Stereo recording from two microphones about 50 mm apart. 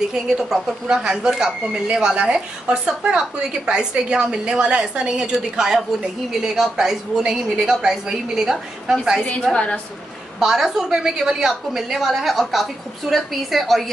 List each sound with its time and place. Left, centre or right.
0.1 s a woman's voice: centre
9.5 s a woman's voice: left
10.4 s a woman's voice: centre